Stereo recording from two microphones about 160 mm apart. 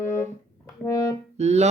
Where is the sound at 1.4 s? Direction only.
45° right (ahead or behind).